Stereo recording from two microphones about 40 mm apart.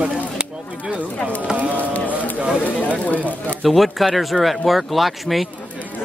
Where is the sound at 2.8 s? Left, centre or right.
Left.